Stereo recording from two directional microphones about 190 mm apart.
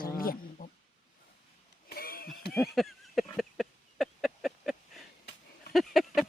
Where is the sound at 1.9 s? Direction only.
50° left (ahead or behind).